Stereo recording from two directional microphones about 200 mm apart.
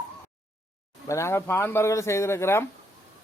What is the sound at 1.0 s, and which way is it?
A man's voice, 15° left (ahead or behind).